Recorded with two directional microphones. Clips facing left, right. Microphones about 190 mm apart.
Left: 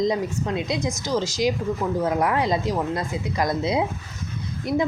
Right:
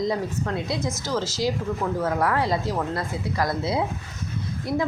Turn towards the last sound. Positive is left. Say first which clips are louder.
# left 2 dB
turn(degrees=20)  # may be behind; listen again after turning